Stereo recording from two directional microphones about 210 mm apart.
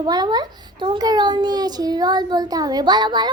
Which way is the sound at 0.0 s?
20° right (ahead or behind).